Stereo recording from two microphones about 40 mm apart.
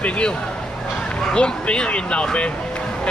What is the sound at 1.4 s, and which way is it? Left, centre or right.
Speech, left.